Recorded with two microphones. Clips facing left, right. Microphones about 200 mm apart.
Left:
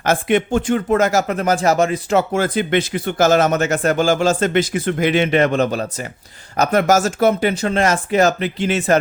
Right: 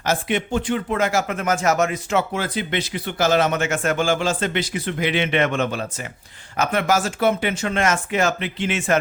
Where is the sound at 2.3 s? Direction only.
50° left (ahead or behind).